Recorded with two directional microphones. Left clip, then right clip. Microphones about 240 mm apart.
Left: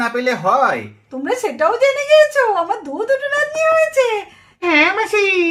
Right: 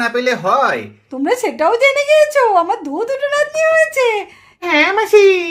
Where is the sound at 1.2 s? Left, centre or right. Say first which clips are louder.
Right 2 dB; right.